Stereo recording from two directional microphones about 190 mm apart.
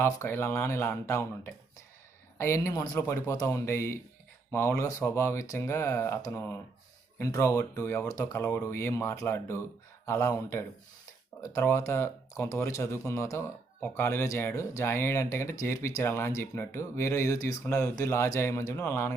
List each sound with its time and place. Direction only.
0.0 s speech: 15° left (ahead or behind)